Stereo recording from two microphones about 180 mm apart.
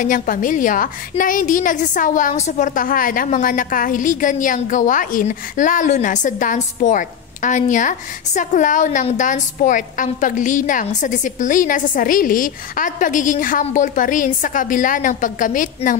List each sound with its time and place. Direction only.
0.0 s a woman's voice: 45° left (ahead or behind)